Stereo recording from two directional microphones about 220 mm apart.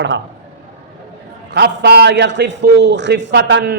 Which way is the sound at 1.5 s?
50° right (ahead or behind).